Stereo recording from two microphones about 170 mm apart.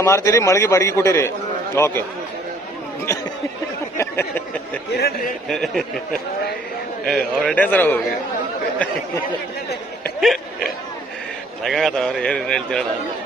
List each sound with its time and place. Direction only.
0.0 s a man's voice: 15° left (ahead or behind)
3.9 s a sound: 15° left (ahead or behind)
4.9 s speech: 65° left (ahead or behind)
5.5 s a man's voice: centre (ahead or behind)
7.1 s a man's voice: 5° left (ahead or behind)
10.2 s a sound: centre (ahead or behind)
11.6 s a man's voice: centre (ahead or behind)